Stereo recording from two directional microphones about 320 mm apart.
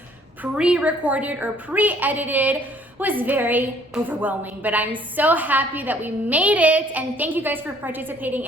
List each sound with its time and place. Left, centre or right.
0.4 s a woman's voice: centre